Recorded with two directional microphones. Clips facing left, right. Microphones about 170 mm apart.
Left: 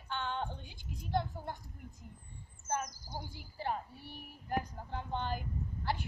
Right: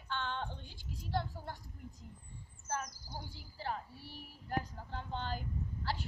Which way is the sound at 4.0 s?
55° left (ahead or behind).